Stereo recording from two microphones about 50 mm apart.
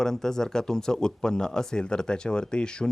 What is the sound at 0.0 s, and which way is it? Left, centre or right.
Speech, centre.